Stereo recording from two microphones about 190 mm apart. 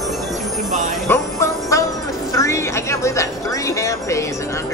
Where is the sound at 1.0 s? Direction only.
15° left (ahead or behind).